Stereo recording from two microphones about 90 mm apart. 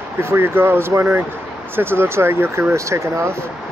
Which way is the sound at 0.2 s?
25° right (ahead or behind).